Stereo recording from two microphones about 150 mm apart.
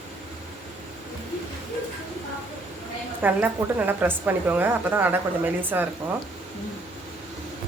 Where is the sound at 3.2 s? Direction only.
10° right (ahead or behind).